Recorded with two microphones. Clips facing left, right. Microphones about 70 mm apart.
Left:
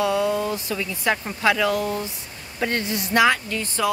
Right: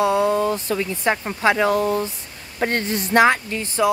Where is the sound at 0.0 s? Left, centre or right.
Right.